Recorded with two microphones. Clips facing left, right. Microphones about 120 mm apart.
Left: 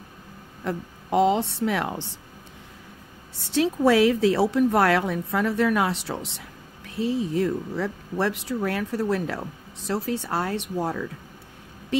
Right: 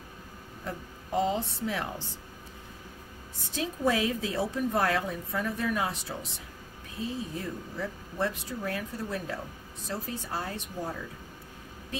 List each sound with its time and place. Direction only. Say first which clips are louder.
0.7 s a woman's voice: left 8 dB; 75° left (ahead or behind)
3.4 s a woman's voice: left 9 dB; 80° left